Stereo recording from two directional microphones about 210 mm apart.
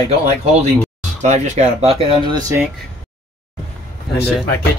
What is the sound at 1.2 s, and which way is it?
Speech, 35° right (ahead or behind).